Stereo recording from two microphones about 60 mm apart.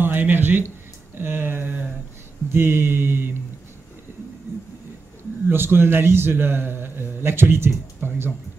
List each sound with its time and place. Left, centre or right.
0.0 s speech: right
2.5 s a sound: right
5.5 s a man's voice: right